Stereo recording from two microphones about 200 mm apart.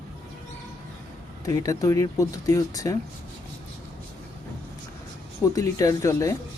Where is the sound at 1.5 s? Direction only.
15° left (ahead or behind).